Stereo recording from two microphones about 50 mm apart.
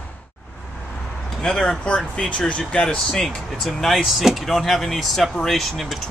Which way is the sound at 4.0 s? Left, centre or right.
Centre.